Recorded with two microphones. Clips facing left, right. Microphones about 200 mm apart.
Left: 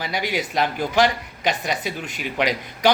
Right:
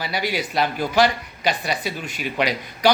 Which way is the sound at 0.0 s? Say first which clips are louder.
Even; 15° left (ahead or behind).